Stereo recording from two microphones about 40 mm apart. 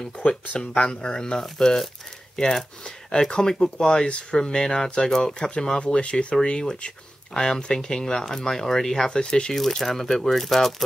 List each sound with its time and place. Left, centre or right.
0.6 s speech: left
9.6 s speech: centre